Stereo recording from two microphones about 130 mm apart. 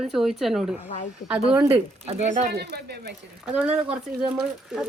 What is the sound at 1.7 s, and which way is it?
Speech, 55° right (ahead or behind).